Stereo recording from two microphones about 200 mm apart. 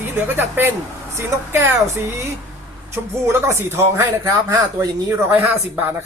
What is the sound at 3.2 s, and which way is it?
Speech, 10° right (ahead or behind).